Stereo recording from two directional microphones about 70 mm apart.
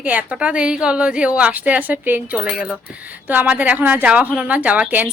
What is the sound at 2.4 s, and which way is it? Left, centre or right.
Speech, centre.